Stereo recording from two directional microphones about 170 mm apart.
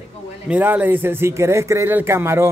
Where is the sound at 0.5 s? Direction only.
10° right (ahead or behind).